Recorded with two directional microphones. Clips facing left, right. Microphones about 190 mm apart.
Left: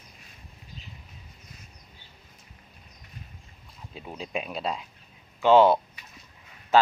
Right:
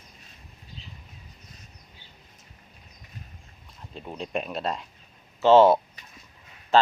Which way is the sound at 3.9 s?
Centre (ahead or behind).